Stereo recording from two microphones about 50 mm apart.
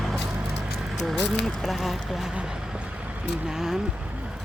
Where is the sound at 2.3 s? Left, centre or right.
Right.